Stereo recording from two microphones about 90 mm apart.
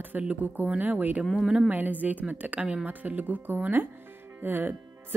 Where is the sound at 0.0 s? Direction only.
20° right (ahead or behind).